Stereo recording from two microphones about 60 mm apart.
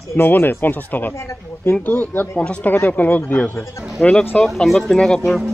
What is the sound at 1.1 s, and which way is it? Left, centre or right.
Speech, left.